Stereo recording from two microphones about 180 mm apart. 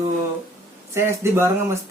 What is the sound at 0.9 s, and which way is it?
Speech, 15° right (ahead or behind).